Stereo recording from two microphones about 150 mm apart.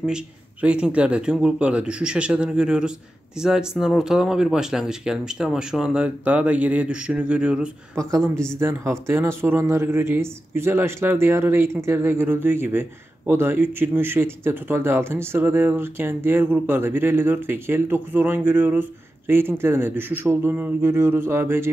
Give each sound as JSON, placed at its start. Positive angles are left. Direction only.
{"t": 0.0, "sound": "speech", "side_deg": -5}
{"t": 7.9, "sound": "a woman's voice", "side_deg": -20}